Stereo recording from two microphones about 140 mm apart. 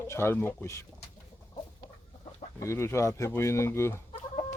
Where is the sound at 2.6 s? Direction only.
20° left (ahead or behind).